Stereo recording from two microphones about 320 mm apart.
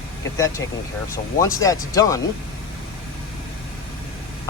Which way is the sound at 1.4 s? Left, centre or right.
Centre.